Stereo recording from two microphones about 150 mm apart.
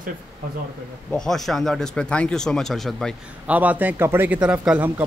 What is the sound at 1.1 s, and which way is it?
Speech, 5° left (ahead or behind).